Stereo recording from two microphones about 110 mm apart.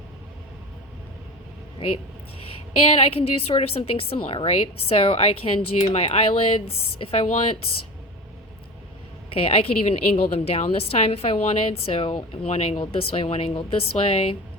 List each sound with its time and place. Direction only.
2.8 s a woman's voice: 60° left (ahead or behind)
5.7 s a woman's voice: 70° left (ahead or behind)
9.3 s a woman's voice: 60° left (ahead or behind)
12.5 s speech: 70° left (ahead or behind)
12.7 s a woman's voice: 55° left (ahead or behind)